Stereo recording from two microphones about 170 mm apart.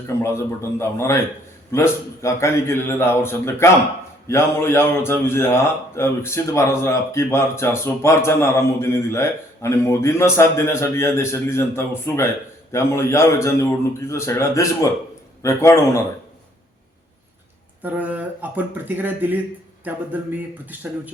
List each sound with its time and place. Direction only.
0.2 s a man's voice: 15° left (ahead or behind)
17.8 s a man's voice: 10° right (ahead or behind)